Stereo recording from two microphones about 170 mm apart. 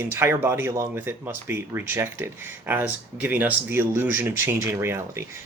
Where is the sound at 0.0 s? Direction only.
15° right (ahead or behind).